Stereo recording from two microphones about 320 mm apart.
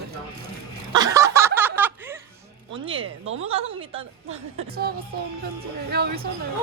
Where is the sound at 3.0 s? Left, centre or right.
Right.